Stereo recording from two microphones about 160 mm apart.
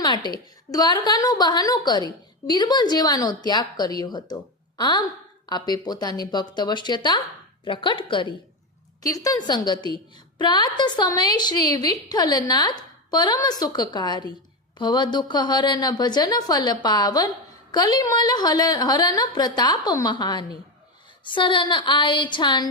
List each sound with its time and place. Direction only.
0.0 s a woman's voice: 30° left (ahead or behind)
9.0 s a woman's voice: 20° left (ahead or behind)